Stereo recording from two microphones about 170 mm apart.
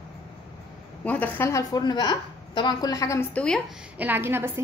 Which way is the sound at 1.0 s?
10° left (ahead or behind).